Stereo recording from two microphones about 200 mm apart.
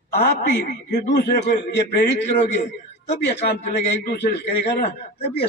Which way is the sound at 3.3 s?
55° left (ahead or behind).